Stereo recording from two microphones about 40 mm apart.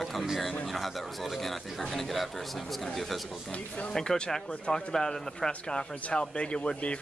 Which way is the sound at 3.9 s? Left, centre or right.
Centre.